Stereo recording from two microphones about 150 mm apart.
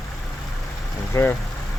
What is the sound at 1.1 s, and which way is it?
Speech, 15° left (ahead or behind).